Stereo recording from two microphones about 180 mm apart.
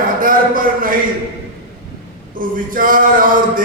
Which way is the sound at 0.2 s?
50° right (ahead or behind).